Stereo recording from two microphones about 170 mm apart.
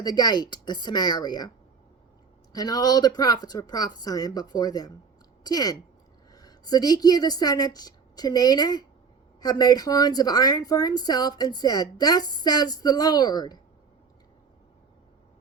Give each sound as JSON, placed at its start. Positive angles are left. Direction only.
{"t": 0.0, "sound": "a woman's voice", "side_deg": 25}
{"t": 2.5, "sound": "a woman's voice", "side_deg": 25}